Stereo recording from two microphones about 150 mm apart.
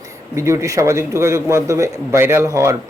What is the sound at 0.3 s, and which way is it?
A man's voice, 20° right (ahead or behind).